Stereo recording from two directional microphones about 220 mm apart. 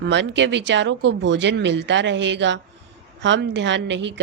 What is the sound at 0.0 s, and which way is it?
Speech, 55° right (ahead or behind).